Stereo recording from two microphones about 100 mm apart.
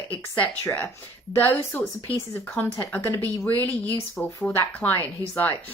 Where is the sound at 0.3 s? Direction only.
15° left (ahead or behind).